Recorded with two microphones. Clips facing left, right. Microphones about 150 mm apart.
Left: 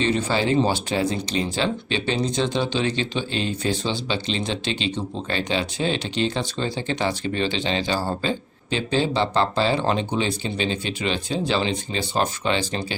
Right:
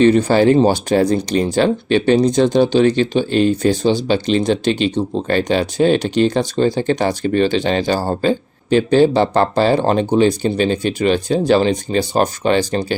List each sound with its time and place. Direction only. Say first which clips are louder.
0.0 s speech: right 11 dB; 45° right (ahead or behind)